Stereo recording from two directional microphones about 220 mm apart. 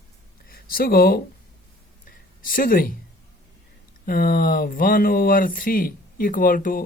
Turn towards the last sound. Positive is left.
turn(degrees=40)  # may be behind; listen again after turning